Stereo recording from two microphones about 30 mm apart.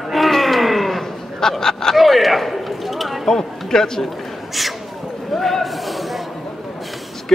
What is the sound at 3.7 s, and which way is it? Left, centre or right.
Speech, centre.